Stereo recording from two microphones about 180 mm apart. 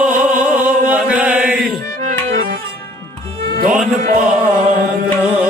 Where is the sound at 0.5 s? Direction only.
5° right (ahead or behind).